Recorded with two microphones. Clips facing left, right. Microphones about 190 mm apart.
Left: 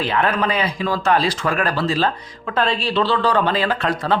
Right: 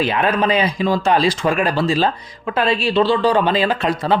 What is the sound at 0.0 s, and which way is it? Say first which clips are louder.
Speech: right 2 dB; 15° right (ahead or behind).